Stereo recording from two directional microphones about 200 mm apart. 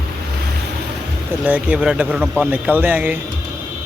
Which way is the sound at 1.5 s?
5° right (ahead or behind).